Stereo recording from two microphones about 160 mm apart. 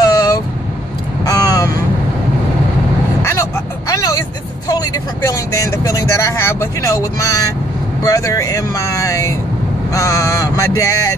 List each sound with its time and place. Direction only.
0.0 s vehicle: 25° left (ahead or behind)
1.2 s crow: 25° left (ahead or behind)
3.2 s vehicle: 20° left (ahead or behind)
8.0 s speech: 20° left (ahead or behind)